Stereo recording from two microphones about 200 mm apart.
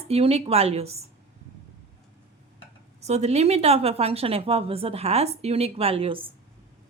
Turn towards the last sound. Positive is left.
turn(degrees=-25)  # may be behind; listen again after turning